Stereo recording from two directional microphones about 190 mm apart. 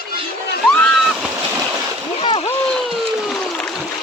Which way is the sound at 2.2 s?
25° left (ahead or behind).